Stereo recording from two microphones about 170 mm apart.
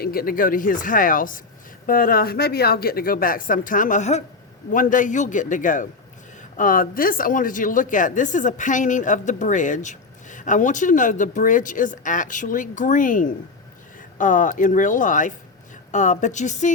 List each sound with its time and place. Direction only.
0.0 s speech: 60° left (ahead or behind)